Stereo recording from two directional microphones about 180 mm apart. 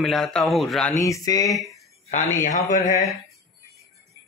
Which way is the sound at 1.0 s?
20° left (ahead or behind).